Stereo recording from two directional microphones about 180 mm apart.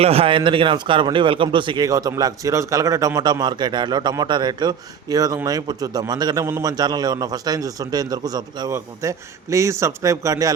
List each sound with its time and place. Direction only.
0.0 s a man's voice: 35° right (ahead or behind)